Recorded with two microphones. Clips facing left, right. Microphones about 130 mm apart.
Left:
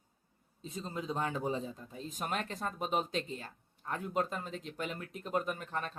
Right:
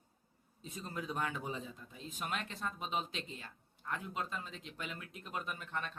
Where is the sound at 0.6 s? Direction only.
25° left (ahead or behind).